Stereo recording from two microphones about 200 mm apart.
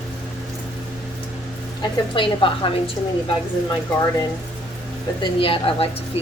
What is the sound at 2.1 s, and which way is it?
Speech, 25° left (ahead or behind).